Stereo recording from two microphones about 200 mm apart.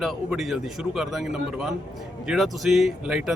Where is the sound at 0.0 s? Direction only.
Centre (ahead or behind).